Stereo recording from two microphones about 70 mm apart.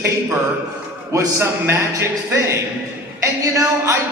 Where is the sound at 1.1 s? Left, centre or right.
Right.